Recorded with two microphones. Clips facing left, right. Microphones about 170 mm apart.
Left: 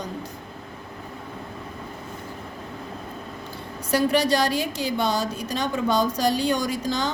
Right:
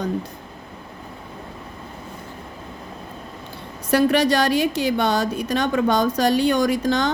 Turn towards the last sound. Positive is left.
turn(degrees=-65)  # may be behind; listen again after turning